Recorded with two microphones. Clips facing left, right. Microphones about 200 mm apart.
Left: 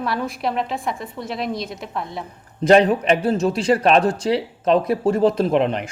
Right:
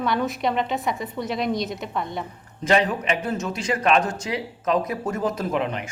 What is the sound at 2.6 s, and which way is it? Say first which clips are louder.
A man's voice: left 7 dB; 35° left (ahead or behind).